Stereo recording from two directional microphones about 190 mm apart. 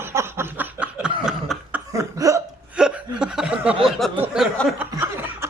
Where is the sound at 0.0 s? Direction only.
15° right (ahead or behind).